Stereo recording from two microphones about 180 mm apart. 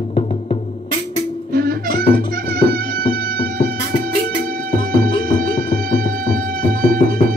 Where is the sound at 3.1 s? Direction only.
55° right (ahead or behind).